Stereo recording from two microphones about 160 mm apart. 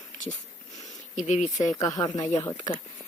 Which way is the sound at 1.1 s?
50° left (ahead or behind).